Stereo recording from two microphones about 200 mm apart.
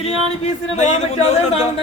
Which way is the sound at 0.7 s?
35° left (ahead or behind).